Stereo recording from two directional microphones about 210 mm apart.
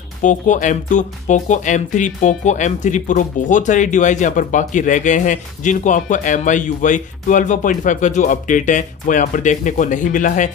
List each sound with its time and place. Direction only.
0.2 s speech: 35° left (ahead or behind)